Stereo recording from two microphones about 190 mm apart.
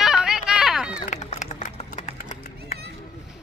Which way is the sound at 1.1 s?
40° left (ahead or behind).